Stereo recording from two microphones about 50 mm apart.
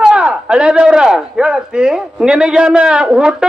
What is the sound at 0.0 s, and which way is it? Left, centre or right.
Speech, centre.